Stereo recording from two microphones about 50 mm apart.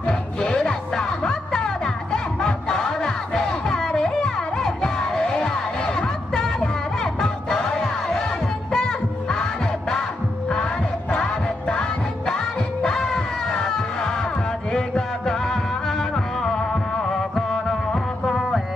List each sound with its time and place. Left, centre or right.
0.0 s music: centre
12.8 s music: centre